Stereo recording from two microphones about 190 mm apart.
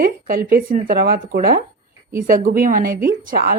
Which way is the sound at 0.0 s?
50° right (ahead or behind).